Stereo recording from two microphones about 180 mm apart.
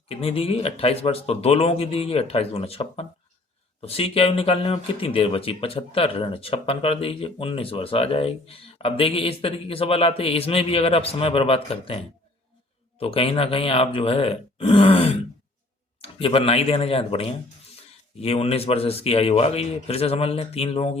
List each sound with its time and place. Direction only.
0.1 s speech: 35° left (ahead or behind)
13.0 s speech: 30° left (ahead or behind)